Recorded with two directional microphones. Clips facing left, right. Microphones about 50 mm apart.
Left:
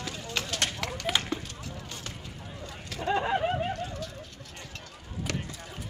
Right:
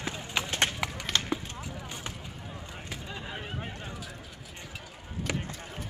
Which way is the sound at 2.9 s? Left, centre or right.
Left.